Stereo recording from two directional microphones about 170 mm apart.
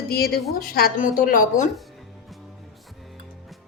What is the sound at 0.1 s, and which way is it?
A woman's voice, 65° left (ahead or behind).